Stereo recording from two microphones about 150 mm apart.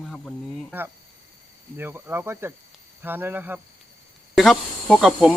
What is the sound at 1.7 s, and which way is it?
Speech, 15° right (ahead or behind).